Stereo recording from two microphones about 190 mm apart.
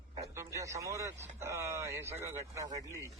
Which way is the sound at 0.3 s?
15° right (ahead or behind).